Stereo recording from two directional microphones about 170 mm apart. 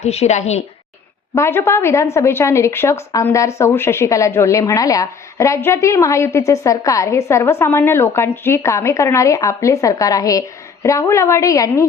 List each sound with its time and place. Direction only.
0.0 s a woman's voice: 40° left (ahead or behind)
1.4 s a woman's voice: 15° left (ahead or behind)